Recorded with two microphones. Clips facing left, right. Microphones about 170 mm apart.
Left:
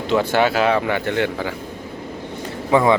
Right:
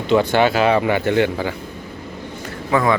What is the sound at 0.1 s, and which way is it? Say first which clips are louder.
Speech: right 2 dB; 5° left (ahead or behind).